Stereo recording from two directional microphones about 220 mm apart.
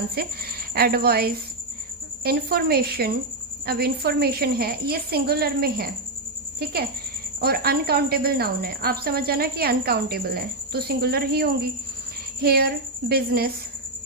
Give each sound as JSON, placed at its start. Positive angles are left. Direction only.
{"t": 0.1, "sound": "a woman's voice", "side_deg": -45}
{"t": 7.4, "sound": "a woman's voice", "side_deg": -45}